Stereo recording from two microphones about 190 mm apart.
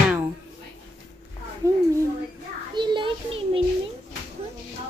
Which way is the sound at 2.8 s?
25° right (ahead or behind).